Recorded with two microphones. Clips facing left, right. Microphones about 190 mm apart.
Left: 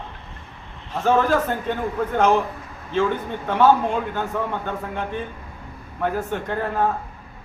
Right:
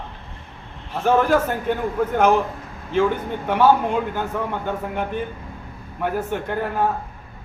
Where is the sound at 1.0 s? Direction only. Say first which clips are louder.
Right 1 dB; 10° right (ahead or behind).